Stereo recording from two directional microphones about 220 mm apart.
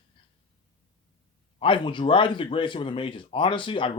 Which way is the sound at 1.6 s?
20° left (ahead or behind).